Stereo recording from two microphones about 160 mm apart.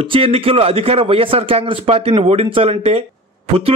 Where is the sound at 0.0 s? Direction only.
35° right (ahead or behind).